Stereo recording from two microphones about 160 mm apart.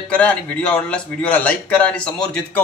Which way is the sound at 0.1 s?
5° left (ahead or behind).